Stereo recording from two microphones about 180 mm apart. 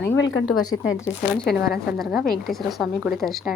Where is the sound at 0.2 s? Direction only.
90° left.